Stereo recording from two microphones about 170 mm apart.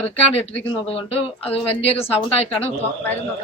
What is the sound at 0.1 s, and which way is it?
Speech, 35° left (ahead or behind).